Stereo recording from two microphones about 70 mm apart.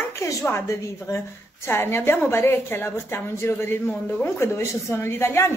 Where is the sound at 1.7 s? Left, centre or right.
Left.